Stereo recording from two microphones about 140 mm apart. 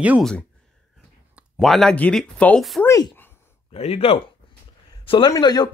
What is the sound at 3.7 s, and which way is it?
Speech, 45° left (ahead or behind).